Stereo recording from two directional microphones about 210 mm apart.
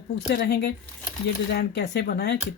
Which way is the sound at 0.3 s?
50° left (ahead or behind).